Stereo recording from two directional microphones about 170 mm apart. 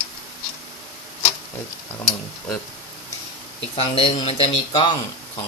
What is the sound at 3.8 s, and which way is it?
Speech, 35° left (ahead or behind).